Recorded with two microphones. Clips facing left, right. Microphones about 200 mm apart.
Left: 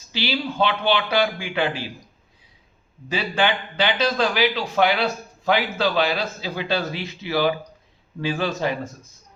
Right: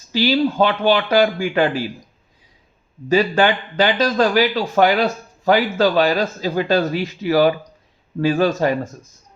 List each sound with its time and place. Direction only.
0.1 s a man's voice: 45° right (ahead or behind)
3.1 s a man's voice: 45° right (ahead or behind)